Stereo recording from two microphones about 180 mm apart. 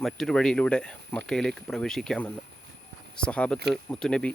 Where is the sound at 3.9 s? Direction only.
5° left (ahead or behind).